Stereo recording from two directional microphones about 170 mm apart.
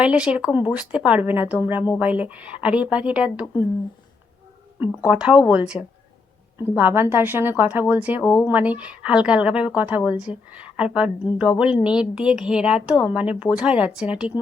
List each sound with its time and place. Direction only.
0.0 s speech: 5° right (ahead or behind)
5.0 s speech: 5° right (ahead or behind)
8.2 s speech: 20° left (ahead or behind)
8.4 s speech: 10° right (ahead or behind)